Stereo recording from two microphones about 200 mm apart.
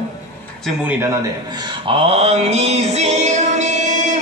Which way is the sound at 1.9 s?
30° right (ahead or behind).